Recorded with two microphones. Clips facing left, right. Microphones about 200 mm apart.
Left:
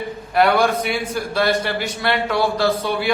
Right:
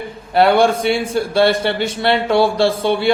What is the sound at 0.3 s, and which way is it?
A man's voice, 30° right (ahead or behind).